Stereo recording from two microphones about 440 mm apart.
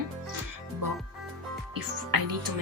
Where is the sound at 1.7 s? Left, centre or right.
Right.